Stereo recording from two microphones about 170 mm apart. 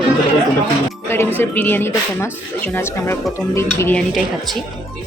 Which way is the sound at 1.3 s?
10° left (ahead or behind).